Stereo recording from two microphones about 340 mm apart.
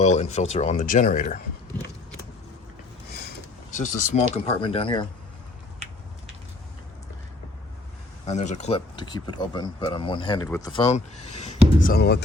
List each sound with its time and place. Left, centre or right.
0.0 s speech: centre
3.7 s a sound: left
4.1 s speech: left
8.3 s speech: centre